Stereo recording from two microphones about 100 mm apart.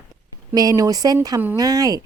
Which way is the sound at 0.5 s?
40° right (ahead or behind).